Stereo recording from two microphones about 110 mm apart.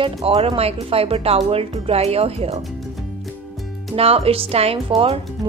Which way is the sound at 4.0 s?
60° right (ahead or behind).